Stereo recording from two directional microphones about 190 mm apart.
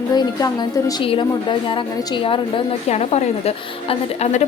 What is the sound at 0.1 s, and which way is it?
A woman's voice, 20° left (ahead or behind).